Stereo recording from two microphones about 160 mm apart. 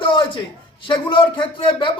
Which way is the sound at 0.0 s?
30° left (ahead or behind).